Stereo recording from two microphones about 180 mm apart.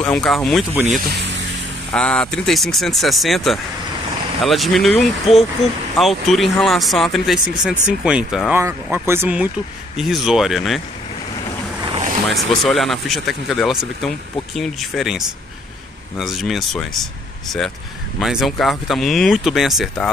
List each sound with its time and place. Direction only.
0.0 s speech: 5° left (ahead or behind)
1.1 s vehicle: 80° right
1.9 s speech: 5° left (ahead or behind)
11.9 s vehicle: 40° right (ahead or behind)
12.3 s speech: centre (ahead or behind)